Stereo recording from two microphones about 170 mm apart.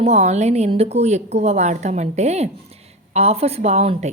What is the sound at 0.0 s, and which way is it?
A woman's voice, 40° right (ahead or behind).